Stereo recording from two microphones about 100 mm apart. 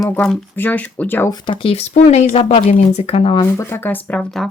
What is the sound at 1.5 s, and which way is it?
Speech, 65° left (ahead or behind).